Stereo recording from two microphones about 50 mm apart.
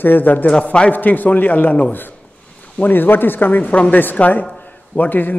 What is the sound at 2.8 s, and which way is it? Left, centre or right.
A man's voice, left.